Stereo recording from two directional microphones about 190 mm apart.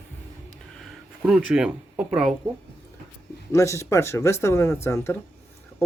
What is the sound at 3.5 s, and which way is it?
Speech, 15° left (ahead or behind).